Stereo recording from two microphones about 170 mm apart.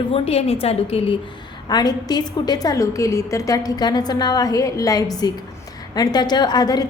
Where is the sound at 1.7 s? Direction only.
25° left (ahead or behind).